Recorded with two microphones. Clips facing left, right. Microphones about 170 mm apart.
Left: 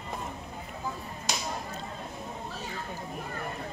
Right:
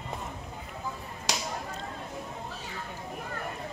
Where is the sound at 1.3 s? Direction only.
90° right.